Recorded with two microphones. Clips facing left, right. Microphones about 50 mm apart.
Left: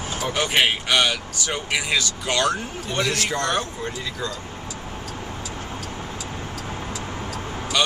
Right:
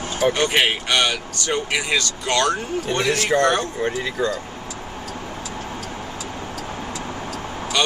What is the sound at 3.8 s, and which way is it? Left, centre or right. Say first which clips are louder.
Speech: right 7 dB; right.